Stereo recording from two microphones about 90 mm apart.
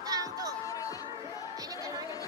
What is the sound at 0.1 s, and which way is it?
Music, 40° right (ahead or behind).